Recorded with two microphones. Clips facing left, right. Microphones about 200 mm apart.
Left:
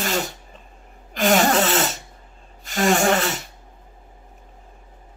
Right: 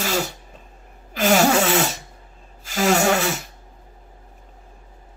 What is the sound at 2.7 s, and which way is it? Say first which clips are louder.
Gasp: even; 5° right (ahead or behind).